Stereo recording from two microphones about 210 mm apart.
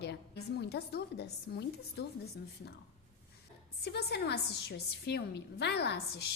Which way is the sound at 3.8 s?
50° left (ahead or behind).